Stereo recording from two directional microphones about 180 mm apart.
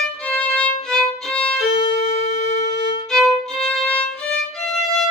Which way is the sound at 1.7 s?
30° left (ahead or behind).